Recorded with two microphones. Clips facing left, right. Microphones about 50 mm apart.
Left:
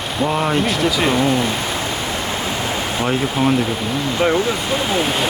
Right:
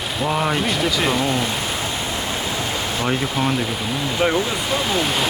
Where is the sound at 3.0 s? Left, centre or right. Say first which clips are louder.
Left 4 dB; centre.